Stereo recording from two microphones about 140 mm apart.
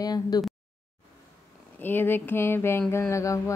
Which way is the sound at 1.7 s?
15° left (ahead or behind).